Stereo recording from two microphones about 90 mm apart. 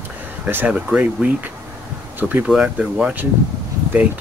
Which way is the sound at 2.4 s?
10° right (ahead or behind).